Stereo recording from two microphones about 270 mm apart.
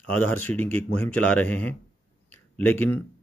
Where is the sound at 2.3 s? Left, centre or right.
Centre.